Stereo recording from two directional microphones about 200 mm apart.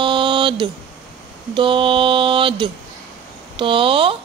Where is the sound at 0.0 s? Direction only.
25° right (ahead or behind).